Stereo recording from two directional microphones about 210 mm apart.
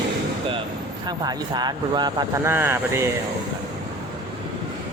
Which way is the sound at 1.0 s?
20° right (ahead or behind).